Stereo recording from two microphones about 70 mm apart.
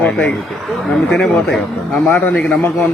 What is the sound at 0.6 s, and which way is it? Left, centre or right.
Speech, centre.